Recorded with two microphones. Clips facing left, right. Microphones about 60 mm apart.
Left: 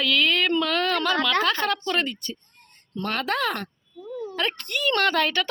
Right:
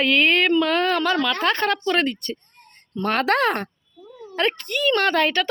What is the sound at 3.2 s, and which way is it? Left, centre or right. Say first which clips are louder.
Speech: right 6 dB; right.